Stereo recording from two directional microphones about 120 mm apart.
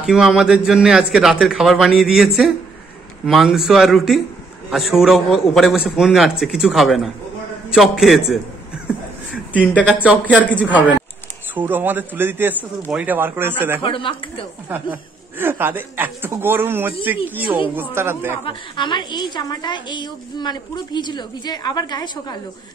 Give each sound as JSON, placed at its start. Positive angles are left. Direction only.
{"t": 0.0, "sound": "a man's voice", "side_deg": -5}
{"t": 9.8, "sound": "speech", "side_deg": -10}
{"t": 10.3, "sound": "a man's voice", "side_deg": 10}
{"t": 10.6, "sound": "speech", "side_deg": -15}
{"t": 13.8, "sound": "speech", "side_deg": 45}
{"t": 14.7, "sound": "speech", "side_deg": -15}
{"t": 18.4, "sound": "a woman's voice", "side_deg": 40}